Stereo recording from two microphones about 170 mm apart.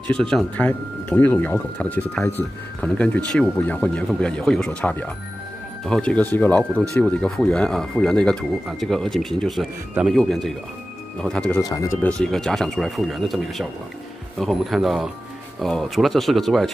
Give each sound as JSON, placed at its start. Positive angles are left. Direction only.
{"t": 0.1, "sound": "speech", "side_deg": 5}
{"t": 11.7, "sound": "speech", "side_deg": 20}
{"t": 12.1, "sound": "speech", "side_deg": 5}